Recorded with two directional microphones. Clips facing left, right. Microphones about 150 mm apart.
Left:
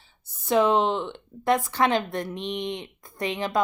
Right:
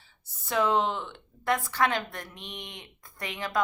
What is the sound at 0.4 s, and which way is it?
Speech, 20° left (ahead or behind).